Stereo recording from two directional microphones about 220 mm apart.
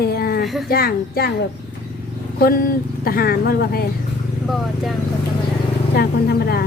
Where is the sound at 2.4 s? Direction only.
40° left (ahead or behind).